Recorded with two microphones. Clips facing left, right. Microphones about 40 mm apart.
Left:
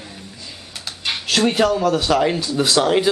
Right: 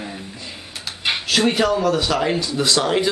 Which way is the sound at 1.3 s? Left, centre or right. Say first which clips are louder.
Left 2 dB; centre.